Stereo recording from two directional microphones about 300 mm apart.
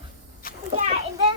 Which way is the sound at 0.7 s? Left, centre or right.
Right.